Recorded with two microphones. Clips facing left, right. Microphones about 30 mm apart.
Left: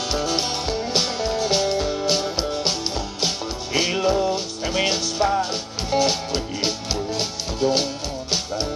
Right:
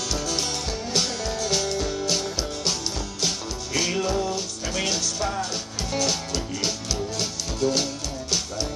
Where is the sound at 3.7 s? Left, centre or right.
Left.